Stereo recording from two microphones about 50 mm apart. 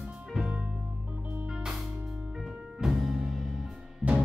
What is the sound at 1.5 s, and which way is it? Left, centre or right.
Music, centre.